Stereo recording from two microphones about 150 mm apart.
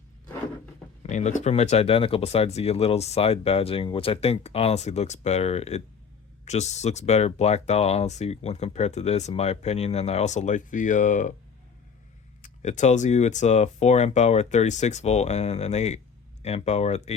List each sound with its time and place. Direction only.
1.0 s speech: 55° left (ahead or behind)
12.4 s speech: 55° left (ahead or behind)